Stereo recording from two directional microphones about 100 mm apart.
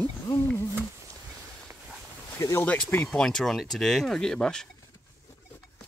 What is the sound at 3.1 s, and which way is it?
Speech, 5° left (ahead or behind).